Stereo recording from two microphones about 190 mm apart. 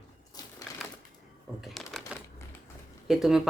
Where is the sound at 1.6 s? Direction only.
Centre (ahead or behind).